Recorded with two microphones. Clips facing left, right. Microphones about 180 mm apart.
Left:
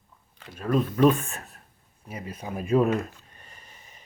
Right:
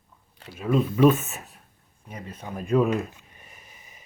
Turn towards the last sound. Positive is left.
turn(degrees=-10)  # may be behind; listen again after turning